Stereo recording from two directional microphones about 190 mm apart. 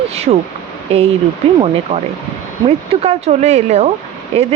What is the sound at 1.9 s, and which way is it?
Speech, 30° right (ahead or behind).